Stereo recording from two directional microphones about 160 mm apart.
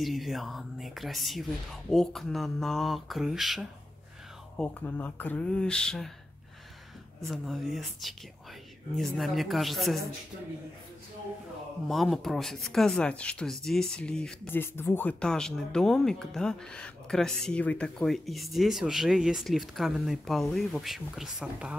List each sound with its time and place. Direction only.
0.0 s speech: centre (ahead or behind)
4.6 s speech: 10° left (ahead or behind)
7.2 s speech: centre (ahead or behind)
11.9 s speech: centre (ahead or behind)